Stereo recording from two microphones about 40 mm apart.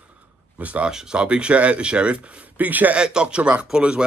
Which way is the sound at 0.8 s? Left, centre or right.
Right.